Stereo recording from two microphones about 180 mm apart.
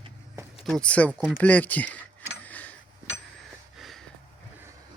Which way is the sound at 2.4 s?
10° left (ahead or behind).